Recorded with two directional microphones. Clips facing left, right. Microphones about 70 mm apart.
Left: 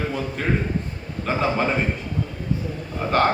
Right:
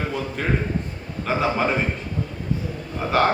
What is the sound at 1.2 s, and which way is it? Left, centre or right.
Speech, centre.